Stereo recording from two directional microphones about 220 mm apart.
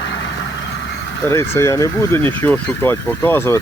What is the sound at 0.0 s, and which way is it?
Vehicle, 50° left (ahead or behind).